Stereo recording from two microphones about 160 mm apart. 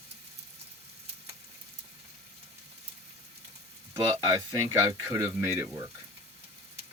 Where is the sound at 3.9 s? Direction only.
25° right (ahead or behind).